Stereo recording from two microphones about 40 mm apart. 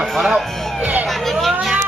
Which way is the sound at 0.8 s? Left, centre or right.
Right.